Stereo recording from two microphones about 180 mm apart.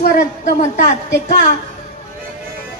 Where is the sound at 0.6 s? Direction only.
40° left (ahead or behind).